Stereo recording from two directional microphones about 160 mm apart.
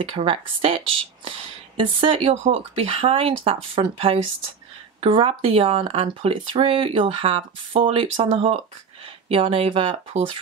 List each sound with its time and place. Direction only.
0.1 s speech: 35° right (ahead or behind)